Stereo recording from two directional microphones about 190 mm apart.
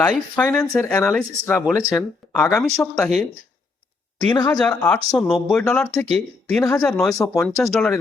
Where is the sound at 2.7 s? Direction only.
5° left (ahead or behind).